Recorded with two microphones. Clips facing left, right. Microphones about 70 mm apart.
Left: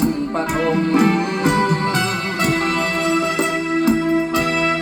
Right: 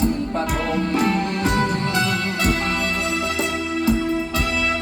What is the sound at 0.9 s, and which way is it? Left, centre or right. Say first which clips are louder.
Music: left 4 dB; left.